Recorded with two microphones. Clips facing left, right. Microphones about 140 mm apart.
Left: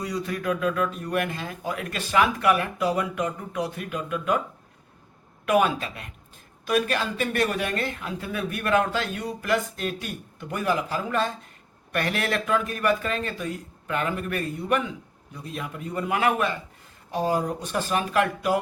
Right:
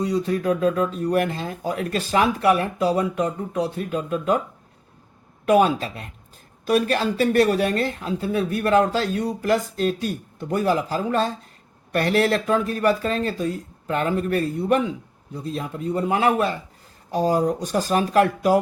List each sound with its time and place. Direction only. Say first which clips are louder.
0.0 s speech: right 6 dB; 30° right (ahead or behind)
5.5 s speech: right 4 dB; 30° right (ahead or behind)